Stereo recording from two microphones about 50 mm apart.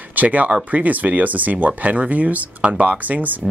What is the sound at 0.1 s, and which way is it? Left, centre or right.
Speech, right.